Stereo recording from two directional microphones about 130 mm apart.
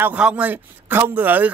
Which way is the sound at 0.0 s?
10° right (ahead or behind).